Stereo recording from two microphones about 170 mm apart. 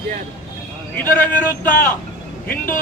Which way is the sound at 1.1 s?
10° left (ahead or behind).